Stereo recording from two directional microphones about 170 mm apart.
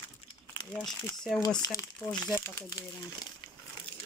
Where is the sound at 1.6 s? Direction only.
20° left (ahead or behind).